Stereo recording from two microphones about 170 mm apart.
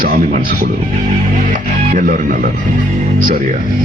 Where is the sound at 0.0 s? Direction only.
55° right (ahead or behind).